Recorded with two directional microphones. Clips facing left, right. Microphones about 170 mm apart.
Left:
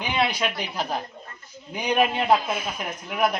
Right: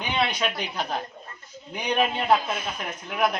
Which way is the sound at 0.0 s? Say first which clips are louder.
Left 1 dB; 5° left (ahead or behind).